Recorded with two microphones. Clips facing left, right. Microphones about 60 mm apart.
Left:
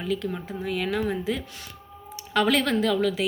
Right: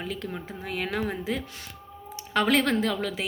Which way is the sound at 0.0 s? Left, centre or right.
Right.